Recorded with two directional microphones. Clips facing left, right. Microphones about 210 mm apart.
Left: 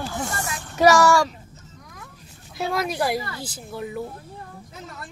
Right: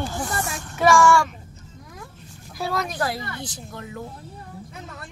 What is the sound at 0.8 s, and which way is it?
Child singing, 40° left (ahead or behind).